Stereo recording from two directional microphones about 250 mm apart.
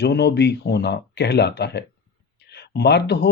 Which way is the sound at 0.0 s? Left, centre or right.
Left.